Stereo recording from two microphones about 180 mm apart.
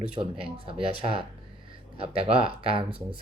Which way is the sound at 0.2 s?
30° right (ahead or behind).